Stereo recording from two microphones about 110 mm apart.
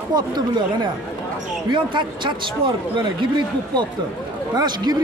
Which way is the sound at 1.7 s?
45° right (ahead or behind).